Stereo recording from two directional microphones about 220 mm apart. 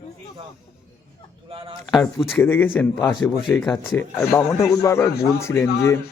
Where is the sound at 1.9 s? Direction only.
Centre (ahead or behind).